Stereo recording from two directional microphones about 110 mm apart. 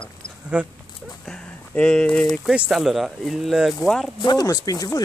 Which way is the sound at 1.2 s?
10° left (ahead or behind).